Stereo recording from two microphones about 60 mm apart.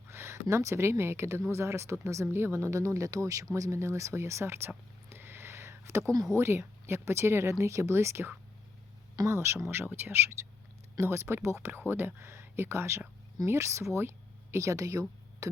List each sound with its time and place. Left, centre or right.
0.1 s a sound: right
0.5 s speech: right
2.2 s speech: right
5.0 s a sound: right
6.3 s speech: right
9.3 s speech: right
9.6 s speech: right